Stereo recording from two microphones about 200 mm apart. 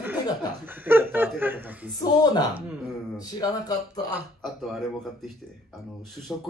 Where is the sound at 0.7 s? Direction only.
10° right (ahead or behind).